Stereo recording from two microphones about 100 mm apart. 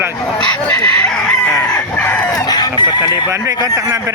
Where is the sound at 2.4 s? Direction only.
40° left (ahead or behind).